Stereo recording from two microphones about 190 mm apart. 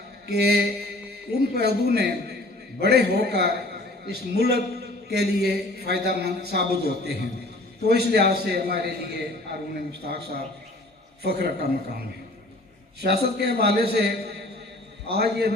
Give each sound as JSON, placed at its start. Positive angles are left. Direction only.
{"t": 0.3, "sound": "a man's voice", "side_deg": -60}
{"t": 13.0, "sound": "a man's voice", "side_deg": -55}